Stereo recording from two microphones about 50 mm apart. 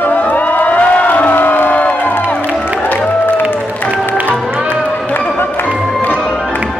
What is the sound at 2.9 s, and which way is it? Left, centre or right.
Music, left.